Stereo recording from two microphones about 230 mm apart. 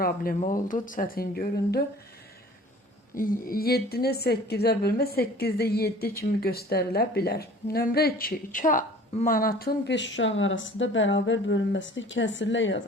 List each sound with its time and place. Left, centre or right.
0.0 s speech: left
3.2 s a woman's voice: left